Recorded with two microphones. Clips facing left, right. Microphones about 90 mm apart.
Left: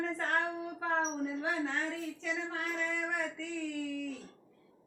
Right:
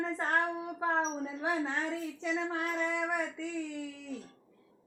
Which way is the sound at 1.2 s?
25° right (ahead or behind).